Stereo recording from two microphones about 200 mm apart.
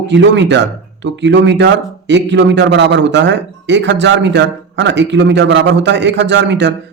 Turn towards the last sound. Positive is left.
turn(degrees=-60)  # may be behind; listen again after turning